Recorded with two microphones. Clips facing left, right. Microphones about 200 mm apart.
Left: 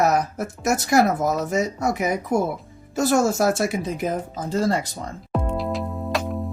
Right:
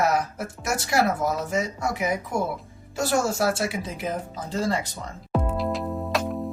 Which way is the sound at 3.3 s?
45° left (ahead or behind).